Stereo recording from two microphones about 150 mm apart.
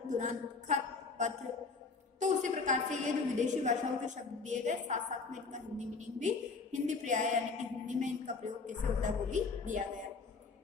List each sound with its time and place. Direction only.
0.1 s a woman's voice: 55° right (ahead or behind)
2.1 s a woman's voice: 55° right (ahead or behind)